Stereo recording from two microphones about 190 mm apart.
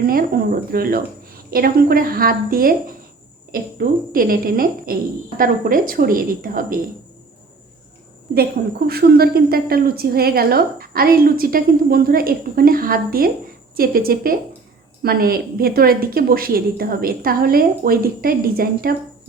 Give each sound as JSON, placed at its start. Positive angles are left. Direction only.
{"t": 0.0, "sound": "a woman's voice", "side_deg": -50}
{"t": 8.3, "sound": "a woman's voice", "side_deg": -50}